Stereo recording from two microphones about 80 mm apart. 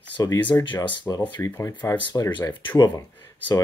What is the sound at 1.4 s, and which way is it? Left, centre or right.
Speech, left.